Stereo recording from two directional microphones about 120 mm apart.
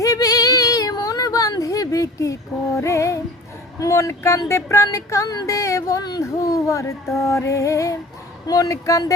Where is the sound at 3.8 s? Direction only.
25° left (ahead or behind).